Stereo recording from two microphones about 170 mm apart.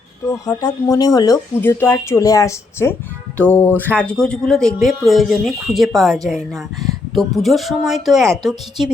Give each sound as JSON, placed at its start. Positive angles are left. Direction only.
{"t": 0.3, "sound": "speech", "side_deg": 20}